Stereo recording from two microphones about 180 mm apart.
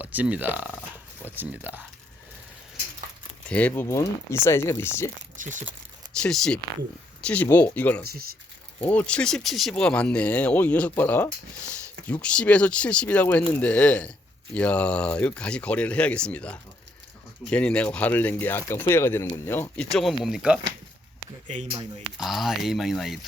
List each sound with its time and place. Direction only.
0.0 s speech: 10° right (ahead or behind)
3.5 s speech: 10° left (ahead or behind)
5.4 s speech: 45° right (ahead or behind)
6.1 s speech: 5° left (ahead or behind)
8.0 s speech: 55° right (ahead or behind)
8.8 s speech: 10° left (ahead or behind)
22.2 s speech: centre (ahead or behind)